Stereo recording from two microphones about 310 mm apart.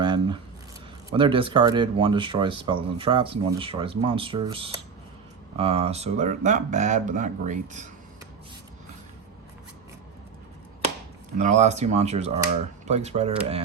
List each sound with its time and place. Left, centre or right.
0.0 s squish: centre
1.1 s speech: centre
11.3 s speech: right